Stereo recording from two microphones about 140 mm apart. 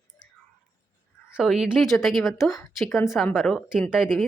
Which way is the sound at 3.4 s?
Centre (ahead or behind).